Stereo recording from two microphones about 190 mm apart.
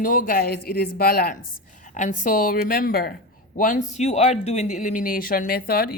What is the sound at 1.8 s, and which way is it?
Speech, 40° left (ahead or behind).